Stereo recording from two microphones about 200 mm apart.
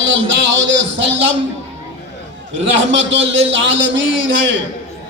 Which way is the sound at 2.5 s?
70° right (ahead or behind).